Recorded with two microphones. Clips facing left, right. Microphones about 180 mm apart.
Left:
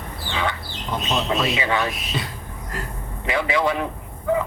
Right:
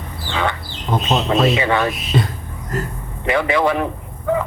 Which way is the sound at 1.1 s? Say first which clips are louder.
Right 6 dB; 50° right (ahead or behind).